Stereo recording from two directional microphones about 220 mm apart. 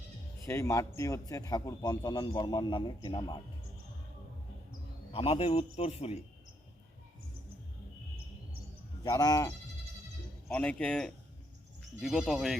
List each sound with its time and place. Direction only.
0.4 s speech: 10° left (ahead or behind)
5.1 s speech: 25° left (ahead or behind)
9.0 s speech: 15° left (ahead or behind)
10.5 s speech: 5° left (ahead or behind)